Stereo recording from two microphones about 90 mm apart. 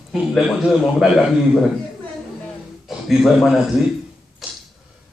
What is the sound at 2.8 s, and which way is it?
Speech, centre (ahead or behind).